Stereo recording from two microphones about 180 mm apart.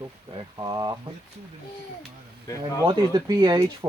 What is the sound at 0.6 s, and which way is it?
Speech, 20° right (ahead or behind).